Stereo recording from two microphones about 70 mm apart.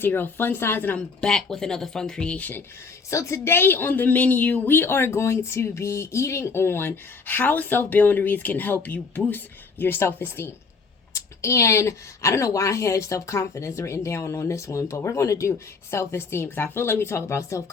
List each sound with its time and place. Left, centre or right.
0.0 s speech: left
0.9 s speech: centre
3.1 s speech: left
11.1 s a woman's voice: left